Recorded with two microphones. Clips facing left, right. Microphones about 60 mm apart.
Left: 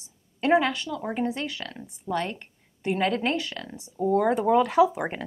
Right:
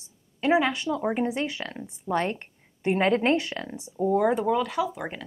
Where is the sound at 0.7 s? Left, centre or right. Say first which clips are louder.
Right 3 dB; right.